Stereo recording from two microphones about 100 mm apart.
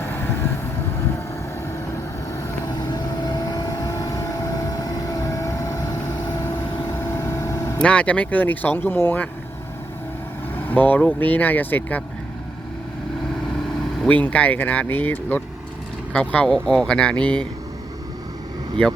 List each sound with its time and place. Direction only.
0.0 s vehicle: 25° left (ahead or behind)
2.6 s vehicle: 45° left (ahead or behind)
7.2 s vehicle: 35° left (ahead or behind)
7.8 s speech: 10° left (ahead or behind)
10.5 s speech: 15° left (ahead or behind)
14.1 s speech: 15° left (ahead or behind)